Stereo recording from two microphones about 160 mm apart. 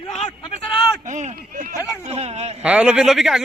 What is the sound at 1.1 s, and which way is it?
Speech, 50° right (ahead or behind).